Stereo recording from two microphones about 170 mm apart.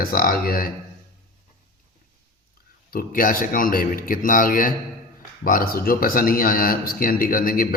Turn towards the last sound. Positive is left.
turn(degrees=55)  # may be behind; listen again after turning